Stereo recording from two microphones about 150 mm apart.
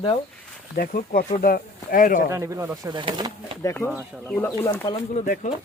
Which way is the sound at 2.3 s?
20° right (ahead or behind).